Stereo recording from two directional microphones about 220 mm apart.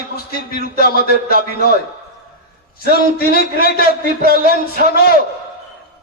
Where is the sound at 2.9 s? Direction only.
45° left (ahead or behind).